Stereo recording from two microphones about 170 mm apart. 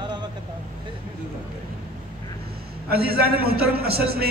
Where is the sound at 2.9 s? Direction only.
65° right (ahead or behind).